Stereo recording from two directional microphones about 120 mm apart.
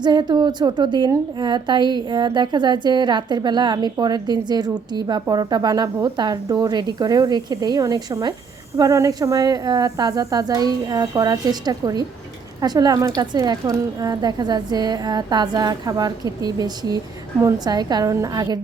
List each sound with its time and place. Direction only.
0.0 s a woman's voice: 40° right (ahead or behind)